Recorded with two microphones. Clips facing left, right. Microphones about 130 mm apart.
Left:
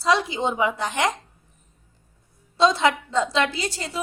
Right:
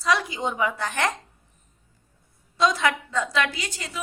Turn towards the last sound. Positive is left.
turn(degrees=35)  # may be behind; listen again after turning